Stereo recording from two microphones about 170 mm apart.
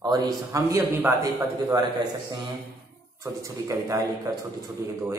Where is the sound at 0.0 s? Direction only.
25° right (ahead or behind).